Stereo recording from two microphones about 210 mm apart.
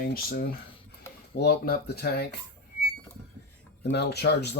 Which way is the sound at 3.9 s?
50° left (ahead or behind).